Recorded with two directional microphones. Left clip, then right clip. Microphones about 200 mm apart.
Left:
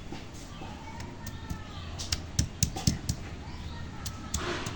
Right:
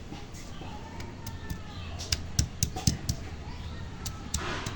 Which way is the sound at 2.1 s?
5° right (ahead or behind).